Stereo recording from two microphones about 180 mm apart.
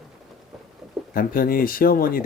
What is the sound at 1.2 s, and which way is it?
Speech, 55° left (ahead or behind).